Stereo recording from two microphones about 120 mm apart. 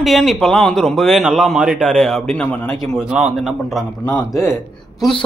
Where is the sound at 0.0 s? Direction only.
Centre (ahead or behind).